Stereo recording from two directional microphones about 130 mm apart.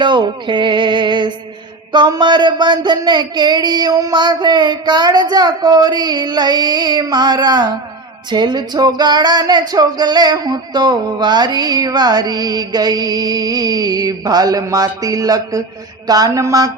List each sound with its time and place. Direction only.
0.0 s music: 35° right (ahead or behind)
16.0 s speech: 30° right (ahead or behind)